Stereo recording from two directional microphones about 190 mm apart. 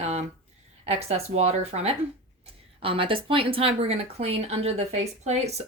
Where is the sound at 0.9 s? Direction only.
30° right (ahead or behind).